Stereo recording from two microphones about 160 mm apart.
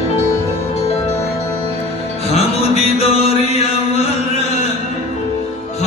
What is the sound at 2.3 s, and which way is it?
Music, 40° left (ahead or behind).